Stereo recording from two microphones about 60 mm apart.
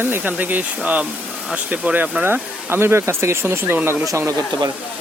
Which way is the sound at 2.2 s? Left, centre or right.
Right.